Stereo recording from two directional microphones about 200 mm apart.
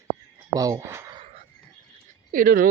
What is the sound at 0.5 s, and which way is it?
Speech, 15° right (ahead or behind).